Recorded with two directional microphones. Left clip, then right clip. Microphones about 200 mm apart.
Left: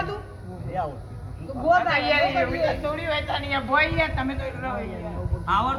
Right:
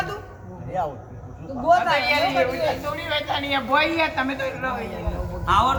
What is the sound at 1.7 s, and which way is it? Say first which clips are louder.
A man's voice: right 2 dB; 35° left (ahead or behind).